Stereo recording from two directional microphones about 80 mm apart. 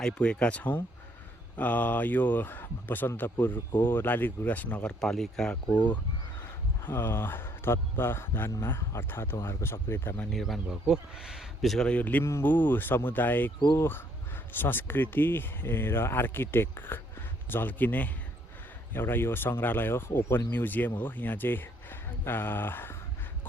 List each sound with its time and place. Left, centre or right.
0.0 s speech: centre
6.4 s speech: left
10.3 s speech: centre
11.9 s speech: centre